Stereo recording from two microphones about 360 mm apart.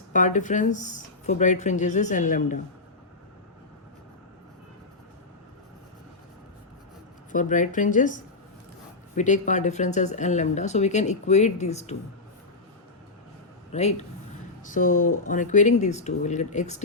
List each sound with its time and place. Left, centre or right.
0.1 s speech: left
7.3 s speech: left
13.7 s speech: centre